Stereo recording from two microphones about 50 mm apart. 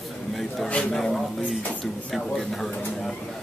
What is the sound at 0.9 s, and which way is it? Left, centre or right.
Speech, centre.